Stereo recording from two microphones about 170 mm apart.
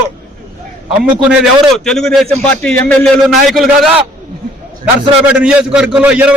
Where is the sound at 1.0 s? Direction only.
5° right (ahead or behind).